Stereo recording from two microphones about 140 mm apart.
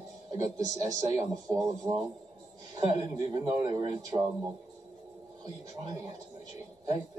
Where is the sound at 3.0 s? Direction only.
30° right (ahead or behind).